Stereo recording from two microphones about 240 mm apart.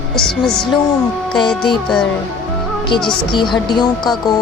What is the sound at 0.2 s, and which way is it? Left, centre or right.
Music, centre.